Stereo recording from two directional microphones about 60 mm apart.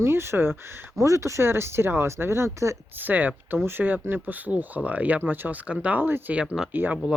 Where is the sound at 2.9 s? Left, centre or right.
Right.